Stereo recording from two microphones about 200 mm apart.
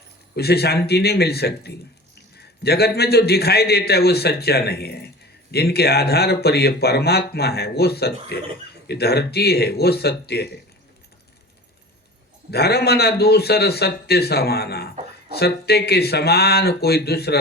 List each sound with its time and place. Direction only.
0.3 s a man's voice: 50° left (ahead or behind)
12.5 s a man's voice: 55° left (ahead or behind)